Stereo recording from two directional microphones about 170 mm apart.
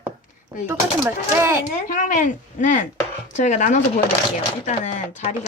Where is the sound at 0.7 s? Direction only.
15° right (ahead or behind).